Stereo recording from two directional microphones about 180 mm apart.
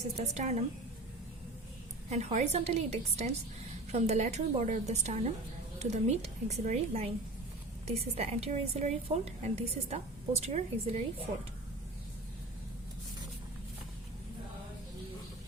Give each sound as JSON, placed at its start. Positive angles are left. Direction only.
{"t": 0.2, "sound": "a woman's voice", "side_deg": -40}
{"t": 2.0, "sound": "a woman's voice", "side_deg": -40}